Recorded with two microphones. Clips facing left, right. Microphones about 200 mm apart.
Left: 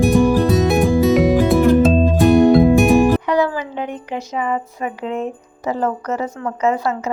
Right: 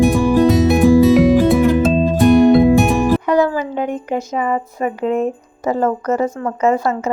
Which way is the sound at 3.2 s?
45° right (ahead or behind).